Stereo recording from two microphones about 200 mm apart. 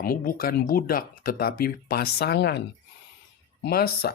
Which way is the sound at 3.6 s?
50° left (ahead or behind).